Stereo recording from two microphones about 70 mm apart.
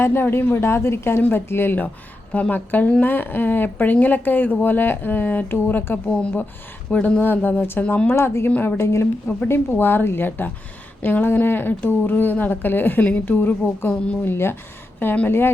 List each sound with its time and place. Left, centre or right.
0.0 s a woman's voice: left
8.4 s a woman's voice: left
8.8 s a woman's voice: left
14.9 s speech: left